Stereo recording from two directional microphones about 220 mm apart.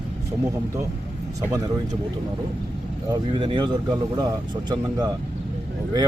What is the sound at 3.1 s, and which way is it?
Speech, 20° right (ahead or behind).